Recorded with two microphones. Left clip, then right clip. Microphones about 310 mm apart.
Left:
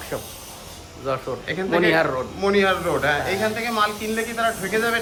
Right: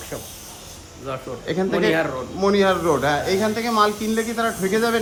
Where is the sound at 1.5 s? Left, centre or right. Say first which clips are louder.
Left 1 dB; centre.